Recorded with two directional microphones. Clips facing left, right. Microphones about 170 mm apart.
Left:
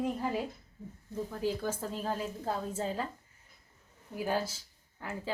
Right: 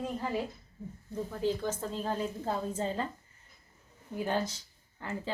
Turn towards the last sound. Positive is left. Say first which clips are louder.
# right 2 dB
turn(degrees=5)  # may be behind; listen again after turning